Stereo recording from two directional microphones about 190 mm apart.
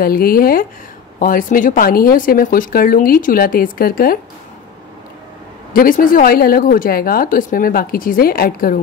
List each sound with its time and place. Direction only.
0.0 s a woman's voice: 50° left (ahead or behind)
5.7 s a woman's voice: 45° left (ahead or behind)